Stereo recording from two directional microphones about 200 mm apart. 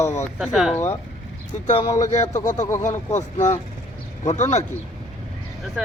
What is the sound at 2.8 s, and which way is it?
Speech, 35° left (ahead or behind).